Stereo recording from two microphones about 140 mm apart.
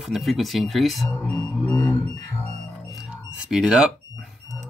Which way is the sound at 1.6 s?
20° left (ahead or behind).